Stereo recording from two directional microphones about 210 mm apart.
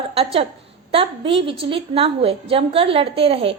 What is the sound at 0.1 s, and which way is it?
A woman's voice, 30° right (ahead or behind).